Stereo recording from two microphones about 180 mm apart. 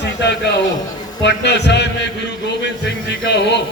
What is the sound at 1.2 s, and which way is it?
Speech, 70° left (ahead or behind).